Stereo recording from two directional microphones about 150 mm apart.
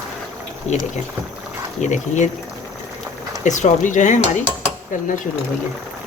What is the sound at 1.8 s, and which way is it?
Speech, 55° left (ahead or behind).